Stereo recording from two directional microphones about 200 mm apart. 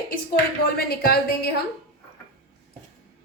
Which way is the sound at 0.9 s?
50° left (ahead or behind).